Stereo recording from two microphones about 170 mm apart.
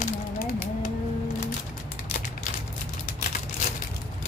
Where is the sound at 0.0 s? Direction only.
60° left (ahead or behind).